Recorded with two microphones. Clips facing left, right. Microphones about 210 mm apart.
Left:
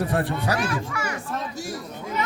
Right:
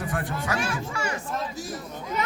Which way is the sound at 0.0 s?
30° left (ahead or behind).